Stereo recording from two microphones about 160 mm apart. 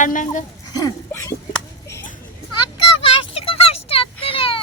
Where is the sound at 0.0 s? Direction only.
50° left (ahead or behind).